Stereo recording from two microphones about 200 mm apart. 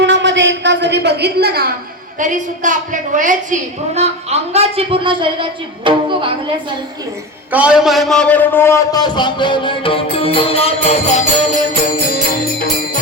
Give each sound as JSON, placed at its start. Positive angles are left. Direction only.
{"t": 0.0, "sound": "a sound", "side_deg": -65}
{"t": 2.1, "sound": "a woman's voice", "side_deg": -40}
{"t": 7.5, "sound": "a man's voice", "side_deg": -5}